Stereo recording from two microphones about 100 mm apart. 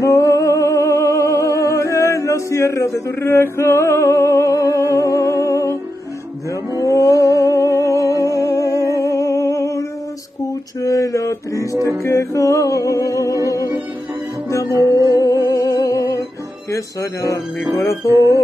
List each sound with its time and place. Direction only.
0.0 s music: 35° left (ahead or behind)
6.8 s music: 35° left (ahead or behind)
8.1 s music: 30° right (ahead or behind)
8.4 s music: 30° left (ahead or behind)
8.9 s humming: 30° left (ahead or behind)
10.8 s a sound: 35° left (ahead or behind)
12.0 s music: 30° left (ahead or behind)
14.7 s music: 35° right (ahead or behind)
15.1 s music: 35° left (ahead or behind)